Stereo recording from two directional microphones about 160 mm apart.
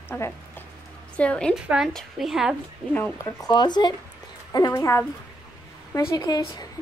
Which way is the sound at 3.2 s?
25° left (ahead or behind).